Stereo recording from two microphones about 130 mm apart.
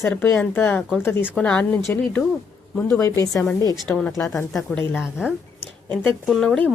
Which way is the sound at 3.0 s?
25° left (ahead or behind).